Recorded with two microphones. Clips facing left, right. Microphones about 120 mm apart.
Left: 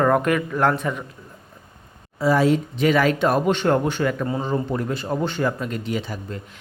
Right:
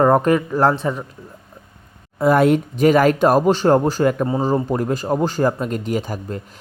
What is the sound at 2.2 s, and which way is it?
Speech, 55° right (ahead or behind).